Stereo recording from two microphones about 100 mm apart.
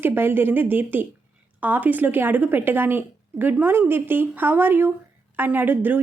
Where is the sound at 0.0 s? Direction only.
20° right (ahead or behind).